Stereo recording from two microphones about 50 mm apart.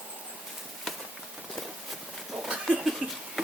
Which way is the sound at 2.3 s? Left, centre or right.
Centre.